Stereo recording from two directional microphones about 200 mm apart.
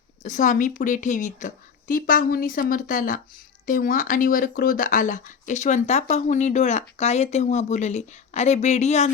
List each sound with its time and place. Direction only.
0.2 s a woman's voice: 40° left (ahead or behind)